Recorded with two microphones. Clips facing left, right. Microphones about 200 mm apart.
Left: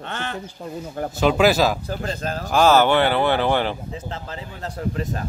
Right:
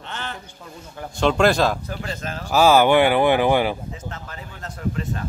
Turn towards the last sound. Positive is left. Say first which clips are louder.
# left 1 dB
turn(degrees=35)  # may be behind; listen again after turning